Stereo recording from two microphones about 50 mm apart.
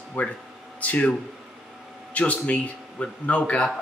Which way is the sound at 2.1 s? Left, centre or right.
Left.